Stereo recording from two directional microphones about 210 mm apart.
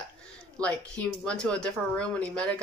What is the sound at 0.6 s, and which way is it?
Speech, 5° left (ahead or behind).